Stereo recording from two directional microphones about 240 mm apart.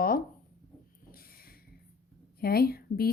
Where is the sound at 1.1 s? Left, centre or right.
Left.